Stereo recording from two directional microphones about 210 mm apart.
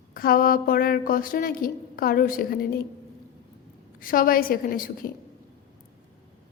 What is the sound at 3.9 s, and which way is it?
A woman's voice, 40° left (ahead or behind).